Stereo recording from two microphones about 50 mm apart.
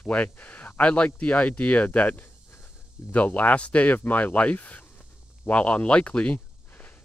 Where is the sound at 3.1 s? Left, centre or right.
Left.